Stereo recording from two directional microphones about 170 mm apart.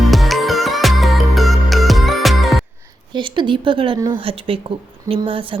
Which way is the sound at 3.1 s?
25° right (ahead or behind).